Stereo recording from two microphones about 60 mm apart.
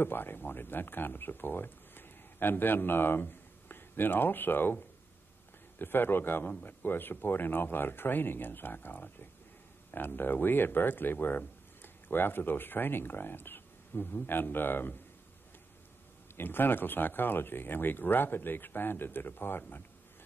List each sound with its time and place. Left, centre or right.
0.0 s speech: left
16.3 s speech: left